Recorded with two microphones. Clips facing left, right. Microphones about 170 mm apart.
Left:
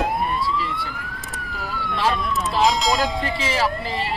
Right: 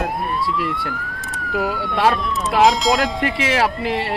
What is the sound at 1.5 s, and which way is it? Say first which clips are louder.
Speech: right 8 dB; 60° right (ahead or behind).